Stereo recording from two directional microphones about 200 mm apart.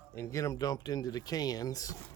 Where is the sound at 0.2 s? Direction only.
15° left (ahead or behind).